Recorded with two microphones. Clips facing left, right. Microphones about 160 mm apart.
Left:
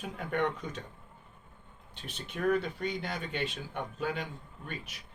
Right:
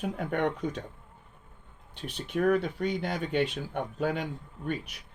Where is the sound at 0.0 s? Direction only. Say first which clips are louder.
Right 3 dB; 55° right (ahead or behind).